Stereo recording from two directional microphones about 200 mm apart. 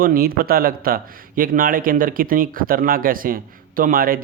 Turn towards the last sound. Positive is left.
turn(degrees=-45)  # may be behind; listen again after turning